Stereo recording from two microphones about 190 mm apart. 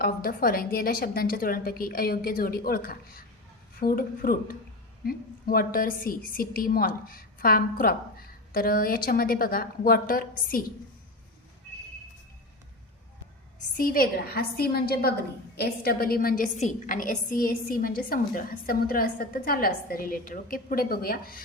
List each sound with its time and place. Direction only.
0.0 s a woman's voice: 50° left (ahead or behind)
13.7 s a woman's voice: 50° left (ahead or behind)